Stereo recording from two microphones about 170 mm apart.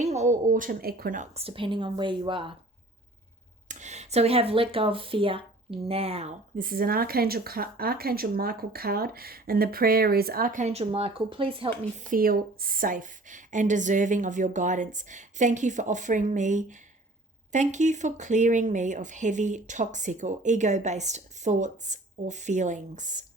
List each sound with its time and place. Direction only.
0.0 s speech: 40° right (ahead or behind)
3.7 s speech: 45° right (ahead or behind)
6.6 s speech: 55° right (ahead or behind); by 12.0 s 35° right (ahead or behind)
12.0 s speech: 55° right (ahead or behind)